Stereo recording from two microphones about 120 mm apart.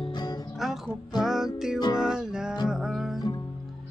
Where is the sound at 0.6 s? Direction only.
Centre (ahead or behind).